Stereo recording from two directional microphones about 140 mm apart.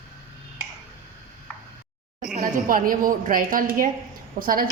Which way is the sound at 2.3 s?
75° right (ahead or behind).